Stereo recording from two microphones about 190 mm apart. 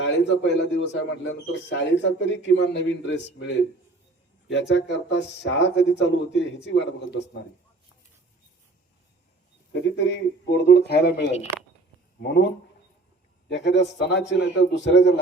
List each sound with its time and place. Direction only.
0.0 s a man's voice: 70° left (ahead or behind)
9.7 s speech: 65° left (ahead or behind)
12.2 s speech: 60° left (ahead or behind)
13.5 s a man's voice: 70° left (ahead or behind)